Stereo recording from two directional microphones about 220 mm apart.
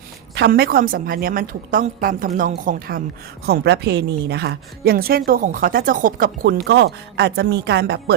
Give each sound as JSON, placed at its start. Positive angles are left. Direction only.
{"t": 0.3, "sound": "a woman's voice", "side_deg": -45}